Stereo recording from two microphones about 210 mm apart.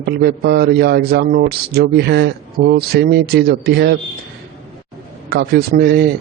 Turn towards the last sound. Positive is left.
turn(degrees=-50)  # may be behind; listen again after turning